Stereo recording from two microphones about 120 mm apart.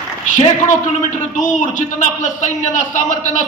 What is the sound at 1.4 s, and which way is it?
A man's voice, 90° left.